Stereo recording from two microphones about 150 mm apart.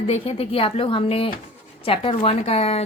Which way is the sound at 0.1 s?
45° left (ahead or behind).